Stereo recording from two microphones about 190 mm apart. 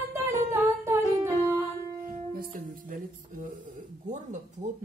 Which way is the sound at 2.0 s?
50° right (ahead or behind).